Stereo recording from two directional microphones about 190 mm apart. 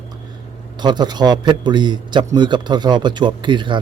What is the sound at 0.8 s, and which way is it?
A man's voice, 20° right (ahead or behind).